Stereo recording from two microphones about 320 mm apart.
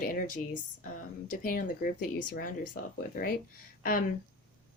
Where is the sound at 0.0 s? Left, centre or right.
Left.